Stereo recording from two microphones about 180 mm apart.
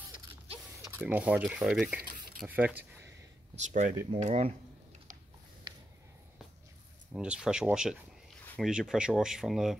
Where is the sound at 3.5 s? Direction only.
45° right (ahead or behind).